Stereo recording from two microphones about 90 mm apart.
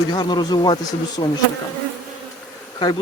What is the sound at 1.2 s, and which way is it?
Bee, 55° left (ahead or behind).